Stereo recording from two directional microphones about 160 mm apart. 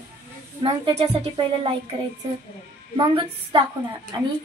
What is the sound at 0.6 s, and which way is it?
A woman's voice, 30° right (ahead or behind).